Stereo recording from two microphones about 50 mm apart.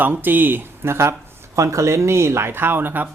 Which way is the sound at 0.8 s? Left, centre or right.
Right.